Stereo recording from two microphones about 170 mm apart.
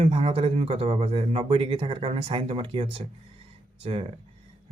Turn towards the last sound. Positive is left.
turn(degrees=-35)  # may be behind; listen again after turning